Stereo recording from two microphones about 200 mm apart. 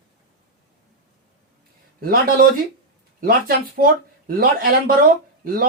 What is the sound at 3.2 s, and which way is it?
Speech, 45° right (ahead or behind).